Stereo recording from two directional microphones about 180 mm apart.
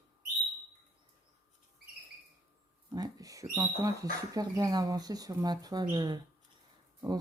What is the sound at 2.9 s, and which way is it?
Speech, 20° right (ahead or behind).